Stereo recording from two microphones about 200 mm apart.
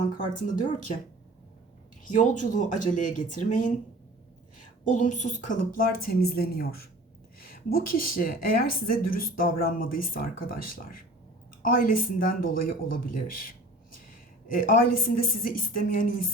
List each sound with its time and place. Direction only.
0.2 s speech: 40° left (ahead or behind)
2.0 s speech: 40° left (ahead or behind)
4.9 s a woman's voice: 40° left (ahead or behind)